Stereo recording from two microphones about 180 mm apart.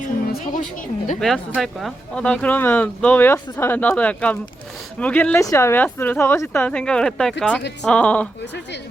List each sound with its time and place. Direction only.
0.5 s a woman's voice: 45° left (ahead or behind)
1.2 s speech: centre (ahead or behind)